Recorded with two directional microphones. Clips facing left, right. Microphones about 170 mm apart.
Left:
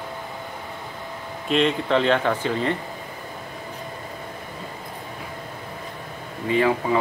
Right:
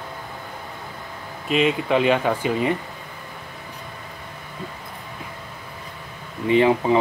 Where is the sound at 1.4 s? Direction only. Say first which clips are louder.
Right 1 dB; 5° right (ahead or behind).